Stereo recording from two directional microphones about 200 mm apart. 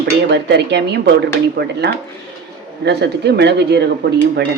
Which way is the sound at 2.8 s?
55° right (ahead or behind).